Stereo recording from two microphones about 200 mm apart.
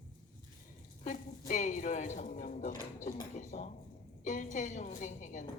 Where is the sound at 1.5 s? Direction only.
40° left (ahead or behind).